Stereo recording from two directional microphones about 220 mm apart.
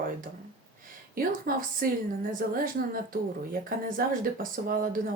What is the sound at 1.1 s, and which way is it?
A woman's voice, 40° right (ahead or behind).